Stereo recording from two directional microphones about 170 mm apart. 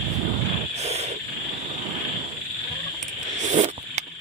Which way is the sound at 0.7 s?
40° right (ahead or behind).